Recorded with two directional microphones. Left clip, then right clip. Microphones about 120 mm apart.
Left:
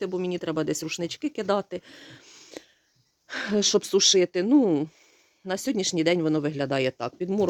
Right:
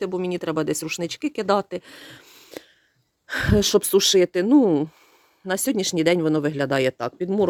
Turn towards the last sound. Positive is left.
turn(degrees=-20)  # may be behind; listen again after turning